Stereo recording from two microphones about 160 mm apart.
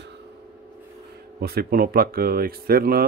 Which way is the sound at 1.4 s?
75° right (ahead or behind).